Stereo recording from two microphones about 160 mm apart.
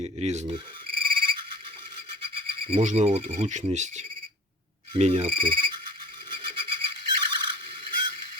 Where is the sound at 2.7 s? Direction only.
50° right (ahead or behind).